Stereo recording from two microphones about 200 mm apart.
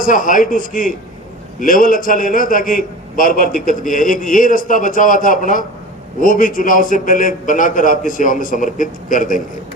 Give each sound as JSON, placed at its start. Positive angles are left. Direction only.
{"t": 0.0, "sound": "a man's voice", "side_deg": 40}